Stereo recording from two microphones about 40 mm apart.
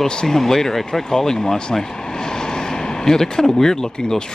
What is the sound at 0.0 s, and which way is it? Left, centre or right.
Speech, centre.